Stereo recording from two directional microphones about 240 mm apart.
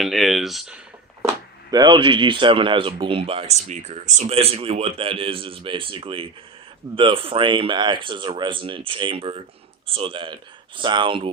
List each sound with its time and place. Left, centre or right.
0.0 s speech: centre
1.7 s speech: centre